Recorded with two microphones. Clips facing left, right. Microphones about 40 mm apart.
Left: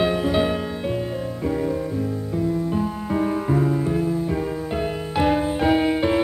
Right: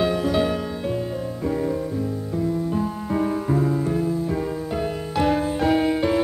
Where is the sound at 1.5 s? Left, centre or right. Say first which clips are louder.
Even; centre.